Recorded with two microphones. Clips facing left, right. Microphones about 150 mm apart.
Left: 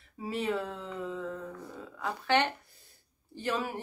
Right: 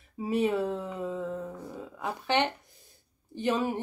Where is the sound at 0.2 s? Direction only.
15° right (ahead or behind).